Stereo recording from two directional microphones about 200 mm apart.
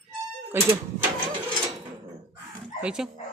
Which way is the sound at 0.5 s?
10° right (ahead or behind).